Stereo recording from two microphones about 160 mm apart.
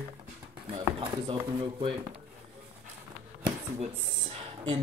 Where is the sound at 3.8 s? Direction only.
40° right (ahead or behind).